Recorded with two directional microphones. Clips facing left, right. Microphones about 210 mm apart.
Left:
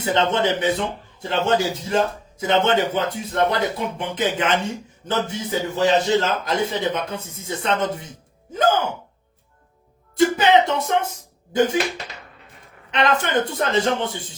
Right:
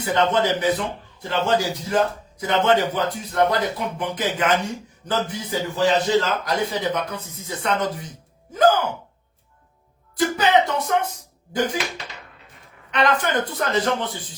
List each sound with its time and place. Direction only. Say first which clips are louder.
0.0 s a man's voice: even; 25° left (ahead or behind)
10.2 s a man's voice: left 3 dB; 25° left (ahead or behind)
12.9 s a man's voice: left 1 dB; 25° left (ahead or behind)